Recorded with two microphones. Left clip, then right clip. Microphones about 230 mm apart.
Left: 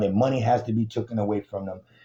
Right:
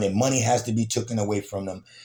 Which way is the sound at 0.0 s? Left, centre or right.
Right.